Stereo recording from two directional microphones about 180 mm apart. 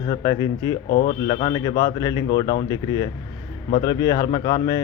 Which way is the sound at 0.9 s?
55° left (ahead or behind).